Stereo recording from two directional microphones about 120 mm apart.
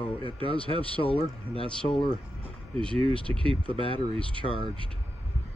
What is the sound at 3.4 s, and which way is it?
Speech, 50° left (ahead or behind).